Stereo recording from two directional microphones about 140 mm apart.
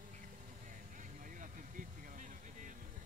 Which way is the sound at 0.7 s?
70° right (ahead or behind).